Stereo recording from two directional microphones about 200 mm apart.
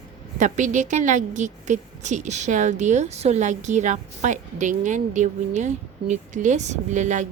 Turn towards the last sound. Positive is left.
turn(degrees=-35)  # may be behind; listen again after turning